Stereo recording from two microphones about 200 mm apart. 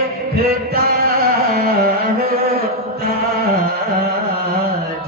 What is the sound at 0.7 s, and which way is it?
Music, 50° right (ahead or behind).